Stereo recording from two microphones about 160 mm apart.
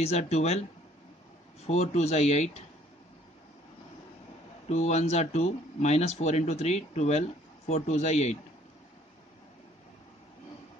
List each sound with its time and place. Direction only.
0.0 s speech: 40° left (ahead or behind)
1.7 s speech: 45° left (ahead or behind)
4.6 s speech: 45° left (ahead or behind)